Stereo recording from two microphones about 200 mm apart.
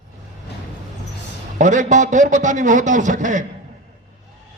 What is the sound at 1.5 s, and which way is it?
A man's voice, 40° right (ahead or behind).